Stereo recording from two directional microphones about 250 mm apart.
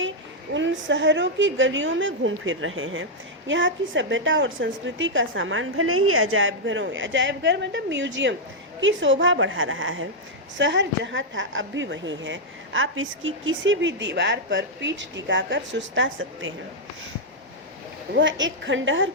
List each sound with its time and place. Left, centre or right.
0.5 s a woman's voice: right
18.1 s a woman's voice: right